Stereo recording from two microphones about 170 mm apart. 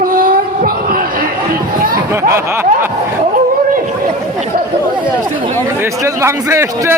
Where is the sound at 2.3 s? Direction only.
15° right (ahead or behind).